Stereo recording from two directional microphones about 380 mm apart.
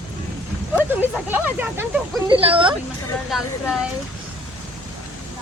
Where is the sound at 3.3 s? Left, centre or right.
Centre.